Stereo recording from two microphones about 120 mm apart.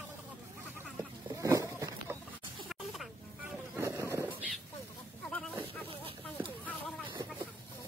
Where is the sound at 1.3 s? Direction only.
30° right (ahead or behind).